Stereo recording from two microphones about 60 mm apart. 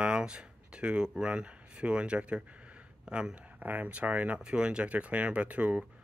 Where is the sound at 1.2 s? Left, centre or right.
Centre.